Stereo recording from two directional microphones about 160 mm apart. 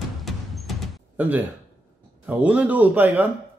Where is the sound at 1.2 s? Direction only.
10° right (ahead or behind).